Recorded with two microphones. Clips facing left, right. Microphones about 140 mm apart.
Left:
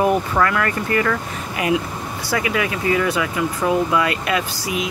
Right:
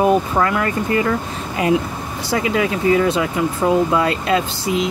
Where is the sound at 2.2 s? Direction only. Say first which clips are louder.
Right 3 dB; 25° right (ahead or behind).